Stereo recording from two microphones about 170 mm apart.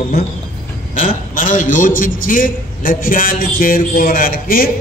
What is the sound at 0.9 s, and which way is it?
A man's voice, 55° left (ahead or behind).